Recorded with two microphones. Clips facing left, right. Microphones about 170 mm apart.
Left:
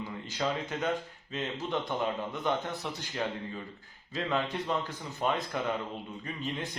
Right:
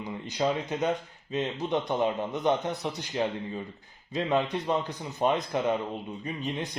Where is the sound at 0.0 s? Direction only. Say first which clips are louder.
Right 5 dB; 20° right (ahead or behind).